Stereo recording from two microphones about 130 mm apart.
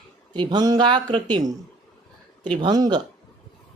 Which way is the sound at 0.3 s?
30° right (ahead or behind).